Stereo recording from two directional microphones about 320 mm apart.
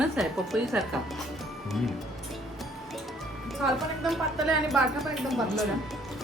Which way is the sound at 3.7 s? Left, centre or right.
Centre.